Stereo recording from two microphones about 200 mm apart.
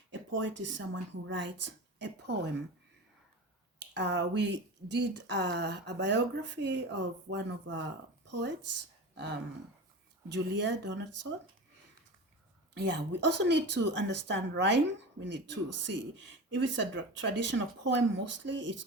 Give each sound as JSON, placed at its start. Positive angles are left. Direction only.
{"t": 0.1, "sound": "speech", "side_deg": -65}
{"t": 3.8, "sound": "speech", "side_deg": -60}
{"t": 12.7, "sound": "speech", "side_deg": -60}